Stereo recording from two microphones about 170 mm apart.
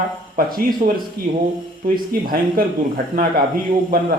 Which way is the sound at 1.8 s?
55° right (ahead or behind).